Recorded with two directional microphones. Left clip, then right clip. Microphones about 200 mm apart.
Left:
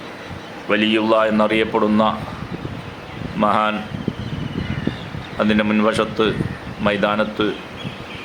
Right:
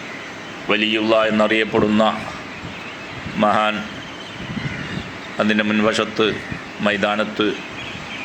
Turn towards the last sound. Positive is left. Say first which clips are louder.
# left 1 dB
turn(degrees=0)  # may be behind; listen again after turning